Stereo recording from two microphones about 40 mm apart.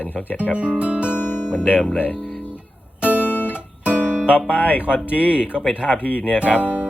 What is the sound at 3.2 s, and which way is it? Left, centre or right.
Guitar, left.